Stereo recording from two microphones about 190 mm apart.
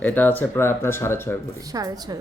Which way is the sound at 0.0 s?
10° left (ahead or behind).